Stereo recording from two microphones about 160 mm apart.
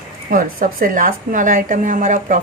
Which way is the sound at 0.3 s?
60° right (ahead or behind).